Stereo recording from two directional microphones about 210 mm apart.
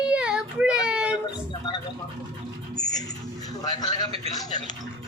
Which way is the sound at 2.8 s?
15° left (ahead or behind).